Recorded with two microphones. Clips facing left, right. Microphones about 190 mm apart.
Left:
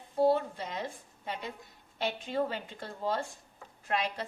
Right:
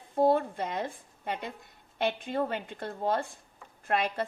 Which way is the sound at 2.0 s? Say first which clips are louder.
Right 2 dB; 55° right (ahead or behind).